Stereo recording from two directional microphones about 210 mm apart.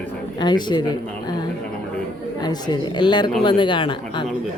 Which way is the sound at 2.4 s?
20° left (ahead or behind).